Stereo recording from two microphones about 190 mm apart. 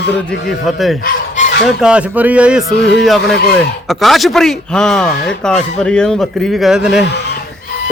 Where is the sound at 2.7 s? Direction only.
65° left (ahead or behind).